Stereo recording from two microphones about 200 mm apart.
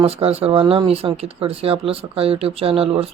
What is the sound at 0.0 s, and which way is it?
Speech, 30° right (ahead or behind).